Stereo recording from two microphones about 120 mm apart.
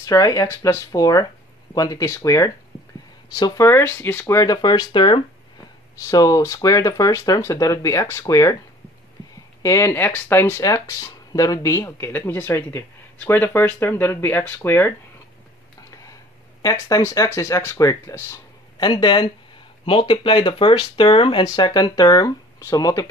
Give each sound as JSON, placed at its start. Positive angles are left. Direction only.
{"t": 0.0, "sound": "speech", "side_deg": 30}
{"t": 4.4, "sound": "speech", "side_deg": 35}
{"t": 6.0, "sound": "speech", "side_deg": 30}
{"t": 9.6, "sound": "speech", "side_deg": 25}
{"t": 16.6, "sound": "speech", "side_deg": 25}
{"t": 18.8, "sound": "speech", "side_deg": 35}